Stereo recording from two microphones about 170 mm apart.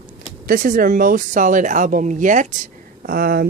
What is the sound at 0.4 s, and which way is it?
Speech, 55° right (ahead or behind).